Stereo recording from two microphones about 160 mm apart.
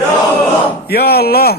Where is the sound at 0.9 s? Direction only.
80° left.